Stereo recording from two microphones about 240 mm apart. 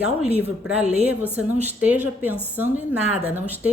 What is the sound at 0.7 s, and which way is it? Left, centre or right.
Speech, right.